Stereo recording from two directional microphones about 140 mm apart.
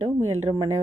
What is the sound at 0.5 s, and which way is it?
Speech, 20° right (ahead or behind).